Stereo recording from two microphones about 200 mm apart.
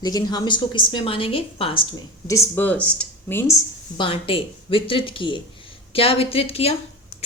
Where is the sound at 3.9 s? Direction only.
25° left (ahead or behind).